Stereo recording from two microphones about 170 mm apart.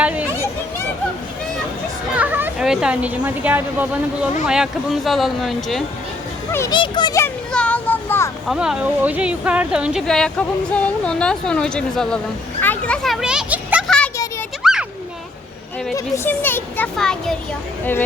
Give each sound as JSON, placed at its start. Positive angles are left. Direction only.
{"t": 0.0, "sound": "a sound", "side_deg": -5}
{"t": 2.1, "sound": "speech", "side_deg": -10}
{"t": 6.5, "sound": "speech", "side_deg": 15}
{"t": 6.7, "sound": "a child's voice", "side_deg": 25}
{"t": 7.5, "sound": "a sound", "side_deg": 5}
{"t": 8.4, "sound": "speech", "side_deg": -5}
{"t": 13.8, "sound": "a sound", "side_deg": 5}
{"t": 14.6, "sound": "children playing", "side_deg": -5}
{"t": 16.0, "sound": "speech", "side_deg": 15}